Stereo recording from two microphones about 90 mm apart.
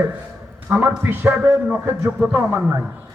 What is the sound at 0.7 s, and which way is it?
A man's voice, 25° right (ahead or behind).